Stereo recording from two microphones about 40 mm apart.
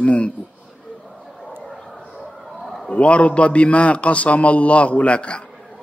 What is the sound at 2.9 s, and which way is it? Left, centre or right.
Speech, left.